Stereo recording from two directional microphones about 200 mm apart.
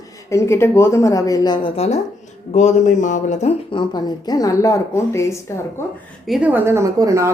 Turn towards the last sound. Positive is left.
turn(degrees=-15)  # may be behind; listen again after turning